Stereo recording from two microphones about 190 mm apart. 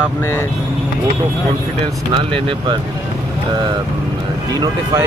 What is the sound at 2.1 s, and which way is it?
Speech, 25° right (ahead or behind).